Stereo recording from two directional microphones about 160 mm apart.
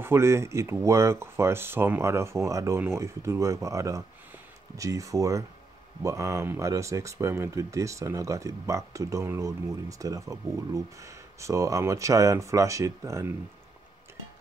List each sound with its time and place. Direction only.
0.0 s speech: 15° right (ahead or behind)